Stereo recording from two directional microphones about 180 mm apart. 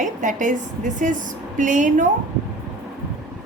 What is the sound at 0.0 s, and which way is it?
A woman's voice, 45° right (ahead or behind).